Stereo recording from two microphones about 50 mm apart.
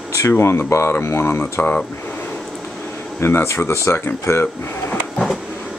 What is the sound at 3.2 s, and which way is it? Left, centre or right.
Speech, left.